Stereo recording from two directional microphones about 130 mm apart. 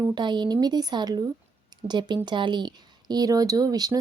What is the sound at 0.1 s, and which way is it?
A woman's voice, 35° right (ahead or behind).